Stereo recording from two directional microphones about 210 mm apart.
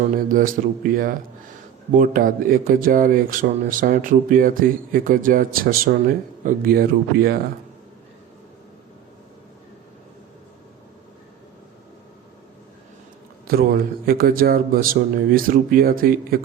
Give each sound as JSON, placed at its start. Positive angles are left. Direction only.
{"t": 0.0, "sound": "speech", "side_deg": -40}
{"t": 13.5, "sound": "a man's voice", "side_deg": -45}